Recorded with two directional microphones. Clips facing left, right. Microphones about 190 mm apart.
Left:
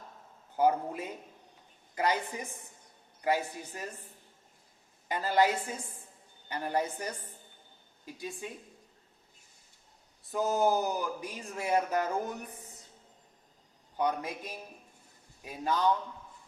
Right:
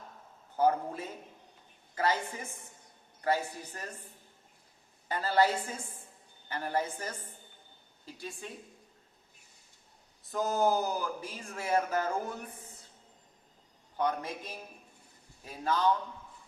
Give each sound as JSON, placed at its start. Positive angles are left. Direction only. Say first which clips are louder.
{"t": 0.5, "sound": "speech", "louder": "left 1 dB", "side_deg": 15}
{"t": 5.0, "sound": "speech", "louder": "even", "side_deg": 15}
{"t": 10.3, "sound": "speech", "louder": "left 1 dB", "side_deg": 15}
{"t": 13.9, "sound": "speech", "louder": "left 1 dB", "side_deg": 15}